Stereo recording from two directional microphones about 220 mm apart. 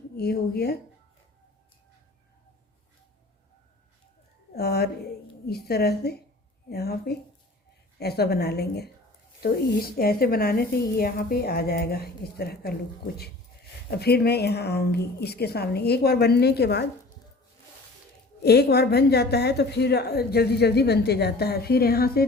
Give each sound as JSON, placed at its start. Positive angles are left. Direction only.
{"t": 0.2, "sound": "a woman's voice", "side_deg": 45}
{"t": 4.5, "sound": "a woman's voice", "side_deg": 45}
{"t": 13.9, "sound": "a woman's voice", "side_deg": 45}
{"t": 18.4, "sound": "a woman's voice", "side_deg": 45}